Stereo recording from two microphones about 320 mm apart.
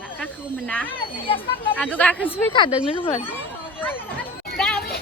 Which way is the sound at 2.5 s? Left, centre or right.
Centre.